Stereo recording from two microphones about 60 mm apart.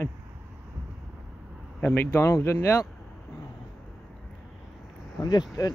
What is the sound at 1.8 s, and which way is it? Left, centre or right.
Speech, left.